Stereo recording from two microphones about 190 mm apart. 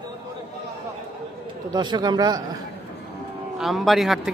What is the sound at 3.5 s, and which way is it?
Speech, centre (ahead or behind).